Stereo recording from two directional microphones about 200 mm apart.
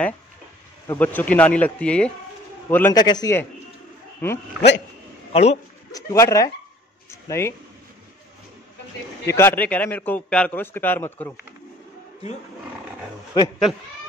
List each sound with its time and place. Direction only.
0.8 s a man's voice: 10° left (ahead or behind)
5.3 s speech: 35° left (ahead or behind)
5.9 s a man's voice: 15° left (ahead or behind)
9.2 s a man's voice: 10° left (ahead or behind)
13.4 s a man's voice: 20° left (ahead or behind)